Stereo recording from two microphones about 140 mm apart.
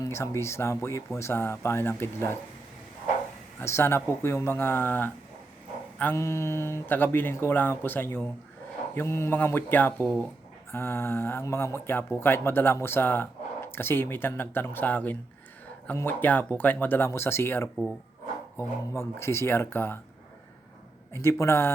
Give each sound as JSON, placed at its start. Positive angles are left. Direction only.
{"t": 0.0, "sound": "speech", "side_deg": 20}
{"t": 3.6, "sound": "speech", "side_deg": 20}
{"t": 21.1, "sound": "speech", "side_deg": 20}